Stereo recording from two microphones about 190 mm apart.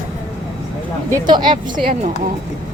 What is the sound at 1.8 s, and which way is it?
Speech, 35° right (ahead or behind).